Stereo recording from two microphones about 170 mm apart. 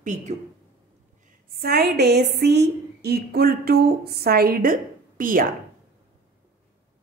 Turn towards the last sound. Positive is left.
turn(degrees=-55)  # may be behind; listen again after turning